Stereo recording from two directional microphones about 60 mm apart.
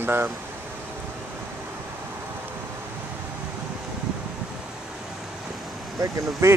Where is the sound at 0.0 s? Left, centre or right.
Right.